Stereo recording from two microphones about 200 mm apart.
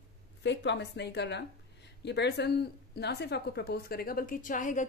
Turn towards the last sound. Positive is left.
turn(degrees=40)  # may be behind; listen again after turning